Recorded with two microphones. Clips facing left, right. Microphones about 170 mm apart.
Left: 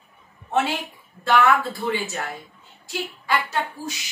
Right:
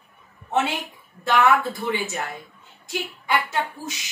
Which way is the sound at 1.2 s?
20° right (ahead or behind).